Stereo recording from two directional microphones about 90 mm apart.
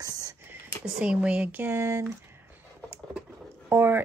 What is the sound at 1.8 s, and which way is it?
Speech, 30° right (ahead or behind).